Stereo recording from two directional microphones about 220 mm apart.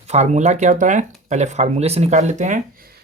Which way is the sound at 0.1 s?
30° right (ahead or behind).